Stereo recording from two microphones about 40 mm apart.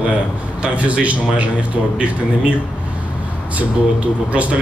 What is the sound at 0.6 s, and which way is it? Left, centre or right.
Speech, right.